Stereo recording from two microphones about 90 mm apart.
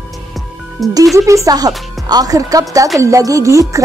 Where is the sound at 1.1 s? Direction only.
35° right (ahead or behind).